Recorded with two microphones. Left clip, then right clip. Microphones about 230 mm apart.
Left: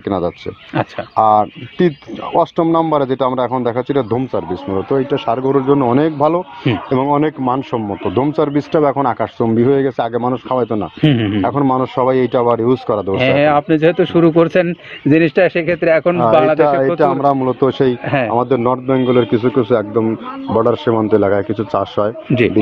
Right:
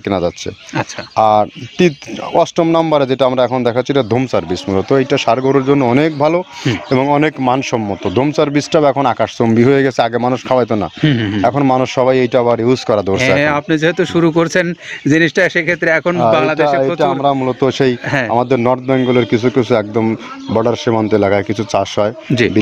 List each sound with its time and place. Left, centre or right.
0.0 s speech: right
11.1 s speech: right
11.4 s a man's voice: right
13.2 s speech: right
18.0 s speech: right
18.3 s a man's voice: right